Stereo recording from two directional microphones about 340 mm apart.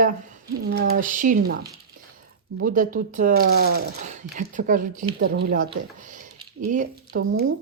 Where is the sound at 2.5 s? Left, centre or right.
Right.